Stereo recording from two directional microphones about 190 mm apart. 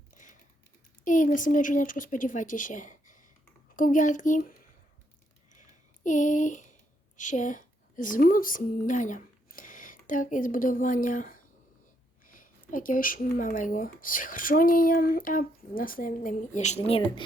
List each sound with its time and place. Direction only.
1.0 s speech: 45° left (ahead or behind)
6.0 s speech: 40° left (ahead or behind)